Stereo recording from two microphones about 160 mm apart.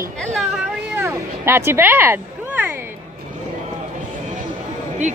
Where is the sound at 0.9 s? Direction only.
15° right (ahead or behind).